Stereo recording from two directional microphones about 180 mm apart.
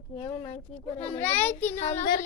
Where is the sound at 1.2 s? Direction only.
10° left (ahead or behind).